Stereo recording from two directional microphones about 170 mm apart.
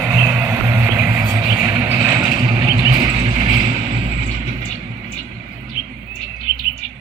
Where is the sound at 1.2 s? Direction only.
20° right (ahead or behind).